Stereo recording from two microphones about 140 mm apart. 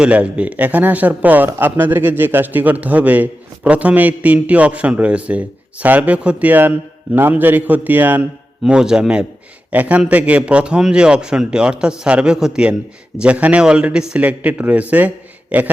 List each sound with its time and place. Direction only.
0.0 s a man's voice: 10° right (ahead or behind)